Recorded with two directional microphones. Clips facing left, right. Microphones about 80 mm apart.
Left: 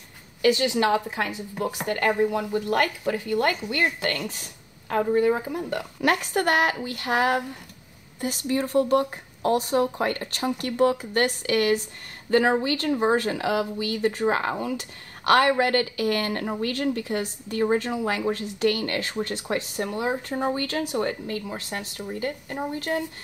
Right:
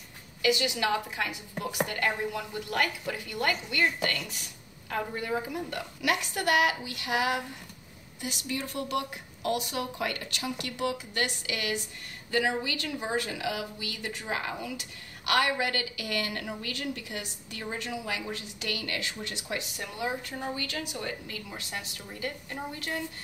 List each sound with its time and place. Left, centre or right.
0.4 s speech: left